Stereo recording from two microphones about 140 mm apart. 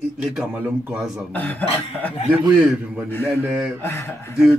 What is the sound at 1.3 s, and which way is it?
Speech, 10° left (ahead or behind).